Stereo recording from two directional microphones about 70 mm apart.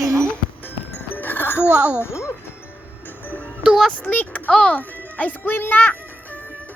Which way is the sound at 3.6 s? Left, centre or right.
Centre.